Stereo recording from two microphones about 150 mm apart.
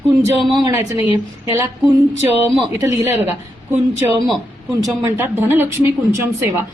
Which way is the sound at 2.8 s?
15° right (ahead or behind).